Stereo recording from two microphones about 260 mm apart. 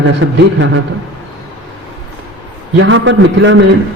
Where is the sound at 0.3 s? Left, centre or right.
Right.